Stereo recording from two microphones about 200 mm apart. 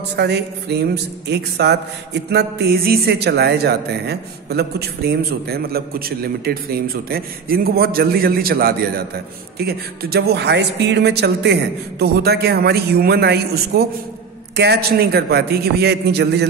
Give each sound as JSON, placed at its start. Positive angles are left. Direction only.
{"t": 0.1, "sound": "music", "side_deg": -55}
{"t": 1.3, "sound": "a man's voice", "side_deg": -55}